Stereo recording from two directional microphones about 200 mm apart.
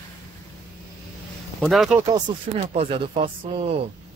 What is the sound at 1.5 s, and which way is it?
Speech, centre (ahead or behind).